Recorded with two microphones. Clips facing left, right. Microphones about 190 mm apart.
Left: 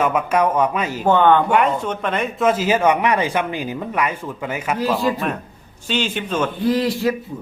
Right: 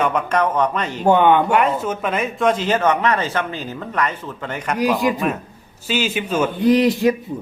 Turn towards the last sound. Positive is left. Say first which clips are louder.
# right 4 dB
turn(degrees=-20)  # may be behind; listen again after turning